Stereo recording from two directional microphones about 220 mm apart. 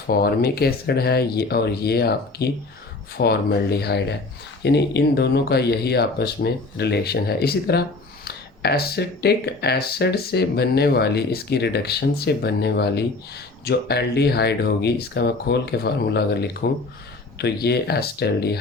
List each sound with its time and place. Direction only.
0.1 s speech: 45° left (ahead or behind)